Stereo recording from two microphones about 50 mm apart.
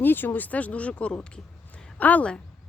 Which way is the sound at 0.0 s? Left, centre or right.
Left.